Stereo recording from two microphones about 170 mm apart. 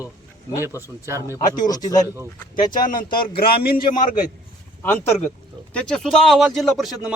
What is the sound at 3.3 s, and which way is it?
Speech, 65° left (ahead or behind).